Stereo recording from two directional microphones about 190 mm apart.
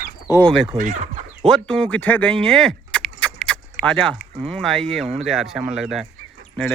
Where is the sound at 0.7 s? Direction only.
40° right (ahead or behind).